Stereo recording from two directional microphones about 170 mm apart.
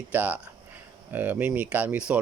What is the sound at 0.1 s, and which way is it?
Speech, 10° right (ahead or behind).